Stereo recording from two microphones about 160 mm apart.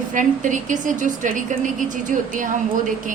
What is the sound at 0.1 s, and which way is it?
A woman's voice, 50° right (ahead or behind).